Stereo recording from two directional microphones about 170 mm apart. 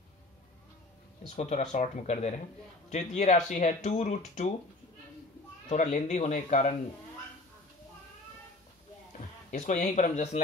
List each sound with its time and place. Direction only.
1.2 s speech: 45° left (ahead or behind)
5.7 s speech: 45° left (ahead or behind)
9.5 s speech: 45° left (ahead or behind)